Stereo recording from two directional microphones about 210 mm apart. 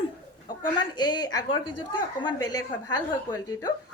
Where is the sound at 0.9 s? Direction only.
20° left (ahead or behind).